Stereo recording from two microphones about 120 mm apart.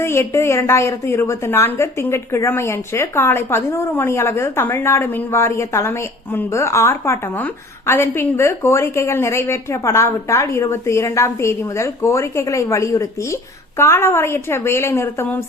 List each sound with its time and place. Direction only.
0.0 s a woman's voice: 20° left (ahead or behind)